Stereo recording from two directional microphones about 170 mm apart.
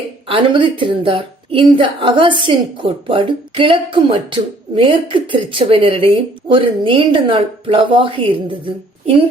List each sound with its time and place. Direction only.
0.3 s a woman's voice: 30° right (ahead or behind)